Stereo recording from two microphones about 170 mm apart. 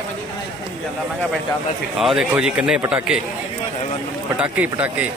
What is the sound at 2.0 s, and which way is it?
Speech, 5° right (ahead or behind).